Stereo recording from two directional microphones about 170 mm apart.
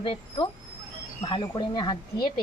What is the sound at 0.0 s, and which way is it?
Speech, 30° left (ahead or behind).